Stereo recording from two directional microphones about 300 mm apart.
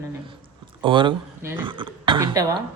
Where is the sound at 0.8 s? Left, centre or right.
Centre.